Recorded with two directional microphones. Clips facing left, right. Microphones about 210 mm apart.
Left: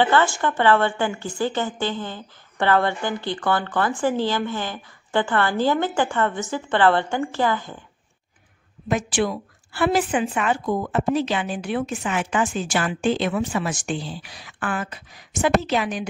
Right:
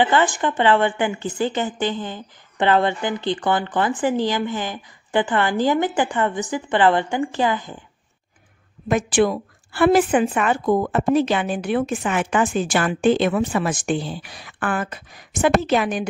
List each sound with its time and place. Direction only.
0.0 s a woman's voice: 15° right (ahead or behind)
8.8 s a woman's voice: 55° right (ahead or behind)
10.6 s a woman's voice: 70° right (ahead or behind); by 16.1 s 55° right (ahead or behind)